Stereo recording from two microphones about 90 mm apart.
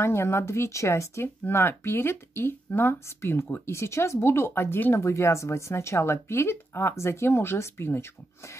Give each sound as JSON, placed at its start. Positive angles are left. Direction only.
{"t": 0.0, "sound": "speech", "side_deg": 30}